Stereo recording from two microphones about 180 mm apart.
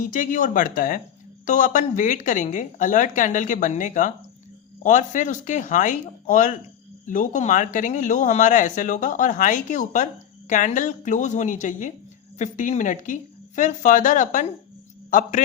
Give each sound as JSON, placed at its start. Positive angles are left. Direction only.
{"t": 0.0, "sound": "speech", "side_deg": 50}